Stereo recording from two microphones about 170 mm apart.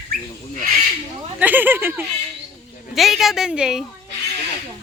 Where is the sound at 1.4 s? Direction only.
10° right (ahead or behind).